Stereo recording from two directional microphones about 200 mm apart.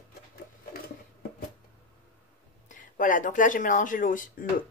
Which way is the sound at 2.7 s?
40° left (ahead or behind).